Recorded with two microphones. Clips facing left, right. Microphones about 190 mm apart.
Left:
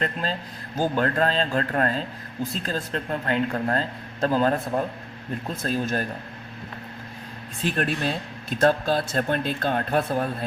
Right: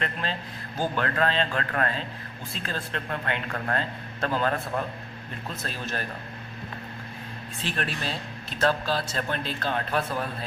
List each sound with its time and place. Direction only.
0.0 s a man's voice: 40° left (ahead or behind)
5.6 s speech: 45° left (ahead or behind)
7.6 s speech: 50° left (ahead or behind)